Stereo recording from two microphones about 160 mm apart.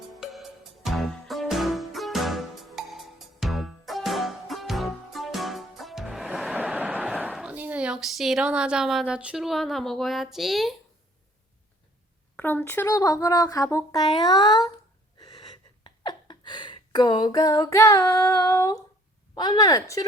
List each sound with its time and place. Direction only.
0.2 s music: centre (ahead or behind)
12.4 s speech: 15° left (ahead or behind)
15.2 s gasp: 25° left (ahead or behind)
19.3 s speech: 25° left (ahead or behind)